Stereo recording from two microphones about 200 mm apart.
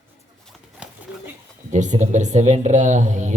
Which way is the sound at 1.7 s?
35° right (ahead or behind).